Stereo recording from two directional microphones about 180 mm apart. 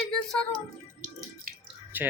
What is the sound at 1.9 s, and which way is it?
Speech, 10° right (ahead or behind).